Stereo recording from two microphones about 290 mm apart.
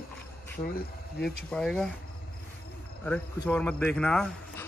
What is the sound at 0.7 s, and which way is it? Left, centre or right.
Speech, left.